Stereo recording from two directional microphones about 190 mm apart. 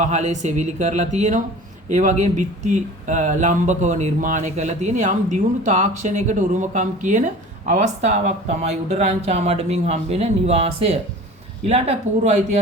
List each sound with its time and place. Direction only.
0.0 s speech: 40° right (ahead or behind)